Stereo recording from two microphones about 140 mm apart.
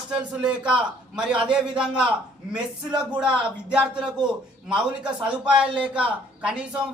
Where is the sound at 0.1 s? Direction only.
5° right (ahead or behind).